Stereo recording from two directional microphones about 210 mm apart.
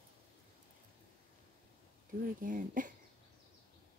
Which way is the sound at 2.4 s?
40° right (ahead or behind).